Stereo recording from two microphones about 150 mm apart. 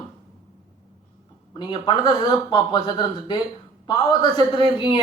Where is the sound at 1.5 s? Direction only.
30° left (ahead or behind).